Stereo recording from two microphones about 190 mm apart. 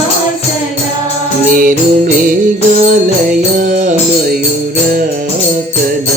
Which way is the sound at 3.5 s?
40° right (ahead or behind).